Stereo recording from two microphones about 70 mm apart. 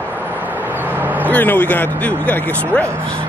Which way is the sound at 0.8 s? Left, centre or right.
Right.